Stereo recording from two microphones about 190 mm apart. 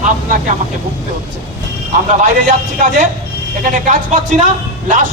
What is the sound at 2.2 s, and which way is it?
A man's voice, 45° right (ahead or behind).